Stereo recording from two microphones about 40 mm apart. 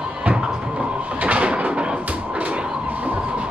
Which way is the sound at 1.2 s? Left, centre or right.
Right.